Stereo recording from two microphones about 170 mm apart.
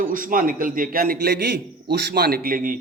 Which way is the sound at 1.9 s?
65° right (ahead or behind).